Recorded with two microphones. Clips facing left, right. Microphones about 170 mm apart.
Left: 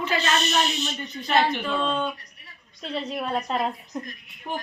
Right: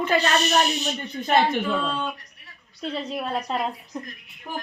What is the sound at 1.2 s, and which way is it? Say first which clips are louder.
Speech: right 2 dB; 50° right (ahead or behind).